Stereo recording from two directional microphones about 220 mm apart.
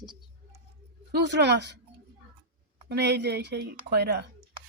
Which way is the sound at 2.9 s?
50° right (ahead or behind).